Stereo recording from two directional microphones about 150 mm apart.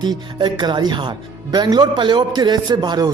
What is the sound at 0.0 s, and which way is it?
Speech, 30° right (ahead or behind).